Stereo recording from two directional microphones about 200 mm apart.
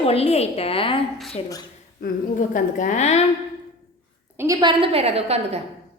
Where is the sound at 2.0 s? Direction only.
40° left (ahead or behind).